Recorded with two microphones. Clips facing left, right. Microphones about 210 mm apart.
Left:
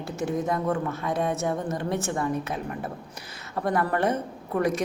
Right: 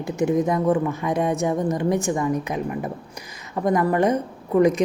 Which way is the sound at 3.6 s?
15° right (ahead or behind).